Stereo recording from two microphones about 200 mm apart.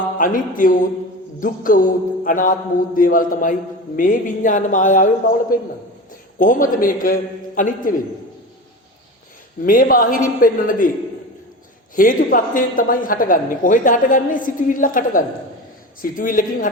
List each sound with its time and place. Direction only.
0.2 s a woman's voice: 40° left (ahead or behind)
9.6 s a woman's voice: 45° left (ahead or behind)
11.9 s a woman's voice: 45° left (ahead or behind)